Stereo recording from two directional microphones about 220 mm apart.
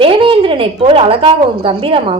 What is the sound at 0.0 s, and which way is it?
A woman's voice, 25° right (ahead or behind).